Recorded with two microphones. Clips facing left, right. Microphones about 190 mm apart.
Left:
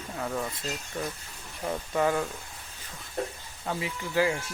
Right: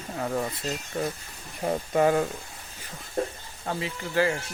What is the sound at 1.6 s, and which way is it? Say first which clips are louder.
Speech: right 4 dB; 40° right (ahead or behind).